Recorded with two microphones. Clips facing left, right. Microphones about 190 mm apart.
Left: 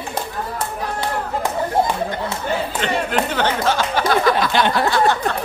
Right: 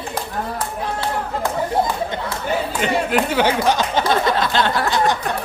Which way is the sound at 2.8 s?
10° right (ahead or behind).